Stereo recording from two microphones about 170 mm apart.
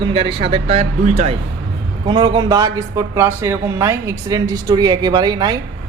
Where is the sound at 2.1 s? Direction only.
25° right (ahead or behind).